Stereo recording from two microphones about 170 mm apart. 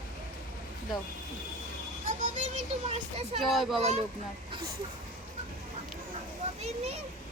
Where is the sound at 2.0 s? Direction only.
45° right (ahead or behind).